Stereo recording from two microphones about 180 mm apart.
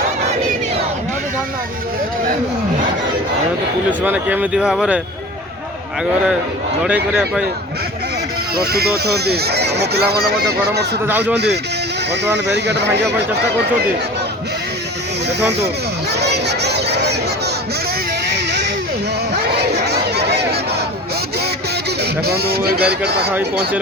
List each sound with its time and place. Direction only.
4.0 s speech: 10° right (ahead or behind)
6.8 s a man's voice: 5° right (ahead or behind)
8.7 s speech: 60° right (ahead or behind)
12.2 s speech: 70° right (ahead or behind)
16.1 s a sound: 70° right (ahead or behind)
19.5 s chatter: 65° right (ahead or behind)
22.3 s speech: 60° right (ahead or behind)